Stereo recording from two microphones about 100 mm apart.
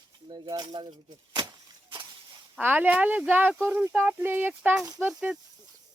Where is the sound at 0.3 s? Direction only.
45° right (ahead or behind).